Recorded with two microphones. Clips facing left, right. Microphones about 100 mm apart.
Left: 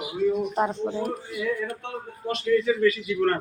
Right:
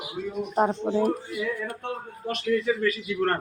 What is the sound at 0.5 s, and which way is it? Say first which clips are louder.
Speech: right 2 dB; 50° right (ahead or behind).